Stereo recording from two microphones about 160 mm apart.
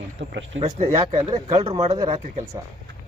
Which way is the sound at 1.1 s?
40° right (ahead or behind).